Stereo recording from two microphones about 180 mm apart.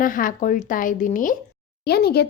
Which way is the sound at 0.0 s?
50° left (ahead or behind).